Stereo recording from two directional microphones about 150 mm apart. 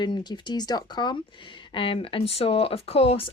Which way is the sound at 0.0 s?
30° left (ahead or behind).